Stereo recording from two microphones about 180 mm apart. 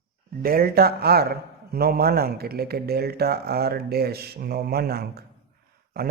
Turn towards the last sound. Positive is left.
turn(degrees=-55)  # may be behind; listen again after turning